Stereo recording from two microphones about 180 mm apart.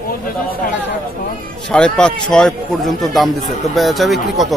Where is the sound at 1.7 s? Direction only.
5° left (ahead or behind).